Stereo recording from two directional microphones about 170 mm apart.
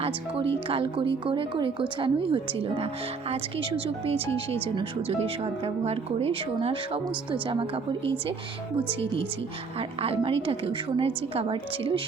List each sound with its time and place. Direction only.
0.0 s a woman's voice: 35° right (ahead or behind)
9.7 s a woman's voice: 35° right (ahead or behind)